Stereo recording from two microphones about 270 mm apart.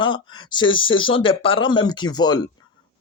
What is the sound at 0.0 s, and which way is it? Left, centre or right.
Speech, centre.